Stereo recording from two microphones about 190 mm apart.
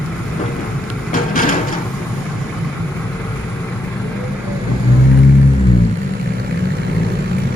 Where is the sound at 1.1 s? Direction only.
45° left (ahead or behind).